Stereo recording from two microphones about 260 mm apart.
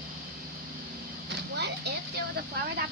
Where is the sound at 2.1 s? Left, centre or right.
Right.